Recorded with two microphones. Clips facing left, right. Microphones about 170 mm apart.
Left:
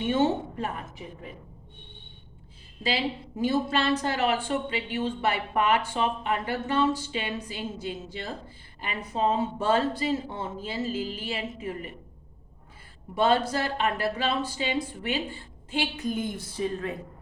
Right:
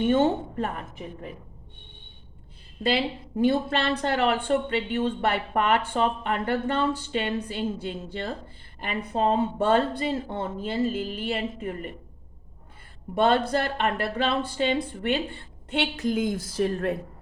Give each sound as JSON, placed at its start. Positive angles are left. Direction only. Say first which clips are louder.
{"t": 0.0, "sound": "a woman's voice", "louder": "right 3 dB", "side_deg": -50}
{"t": 2.8, "sound": "a woman's voice", "louder": "right 3 dB", "side_deg": -60}
{"t": 13.1, "sound": "a woman's voice", "louder": "right 2 dB", "side_deg": -55}